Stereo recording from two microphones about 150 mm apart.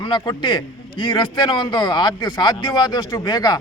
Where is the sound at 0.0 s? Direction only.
30° left (ahead or behind).